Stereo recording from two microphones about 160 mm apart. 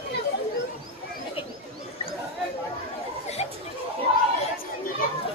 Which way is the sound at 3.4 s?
45° left (ahead or behind).